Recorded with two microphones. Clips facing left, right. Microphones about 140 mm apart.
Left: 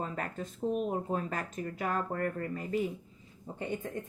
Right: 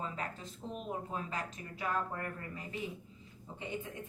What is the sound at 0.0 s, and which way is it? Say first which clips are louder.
Speech: left 4 dB; 50° left (ahead or behind).